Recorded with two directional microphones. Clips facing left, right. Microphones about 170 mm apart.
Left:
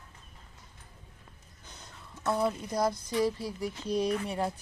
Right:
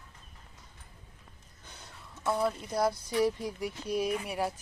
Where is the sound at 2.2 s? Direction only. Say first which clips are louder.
Left 1 dB; 5° right (ahead or behind).